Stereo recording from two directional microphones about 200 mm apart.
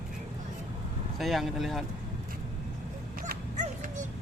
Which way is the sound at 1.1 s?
Centre (ahead or behind).